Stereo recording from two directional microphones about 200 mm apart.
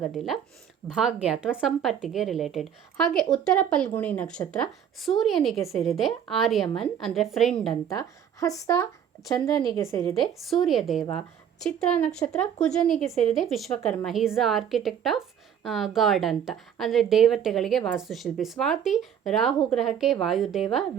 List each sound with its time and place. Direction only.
0.0 s a woman's voice: centre (ahead or behind)
7.9 s a woman's voice: 15° left (ahead or behind)
10.2 s a woman's voice: centre (ahead or behind)